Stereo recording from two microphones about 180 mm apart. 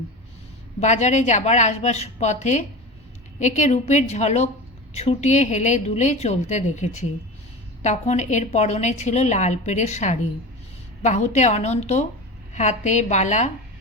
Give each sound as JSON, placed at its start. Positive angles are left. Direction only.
{"t": 0.8, "sound": "a woman's voice", "side_deg": 40}